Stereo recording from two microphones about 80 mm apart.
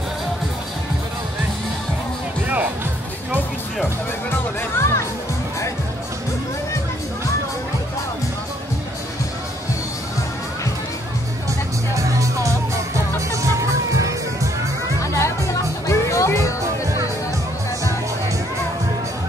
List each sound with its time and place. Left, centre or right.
2.4 s music: right
4.3 s music: left
11.9 s music: right
15.1 s music: left